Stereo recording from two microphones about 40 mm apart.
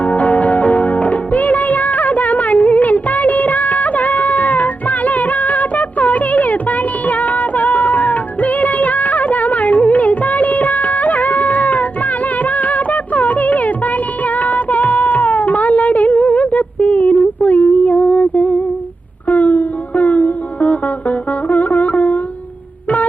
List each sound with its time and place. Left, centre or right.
0.0 s music: left